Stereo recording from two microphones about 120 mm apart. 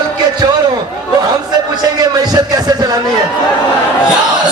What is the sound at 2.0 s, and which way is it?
Speech, 35° right (ahead or behind).